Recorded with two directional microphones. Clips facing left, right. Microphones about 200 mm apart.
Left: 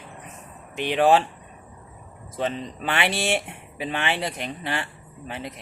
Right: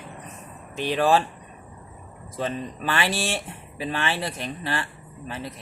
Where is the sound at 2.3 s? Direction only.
20° left (ahead or behind).